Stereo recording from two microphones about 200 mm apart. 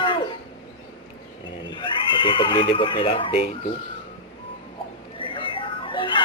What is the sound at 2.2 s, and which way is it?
A man's voice, 25° left (ahead or behind).